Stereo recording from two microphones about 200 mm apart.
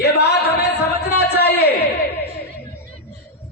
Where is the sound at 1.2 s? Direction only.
55° left (ahead or behind).